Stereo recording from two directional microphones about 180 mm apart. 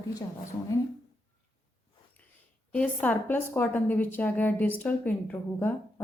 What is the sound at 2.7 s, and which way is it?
A woman's voice, 10° left (ahead or behind).